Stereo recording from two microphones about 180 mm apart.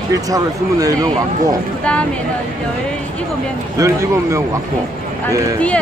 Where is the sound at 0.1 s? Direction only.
20° right (ahead or behind).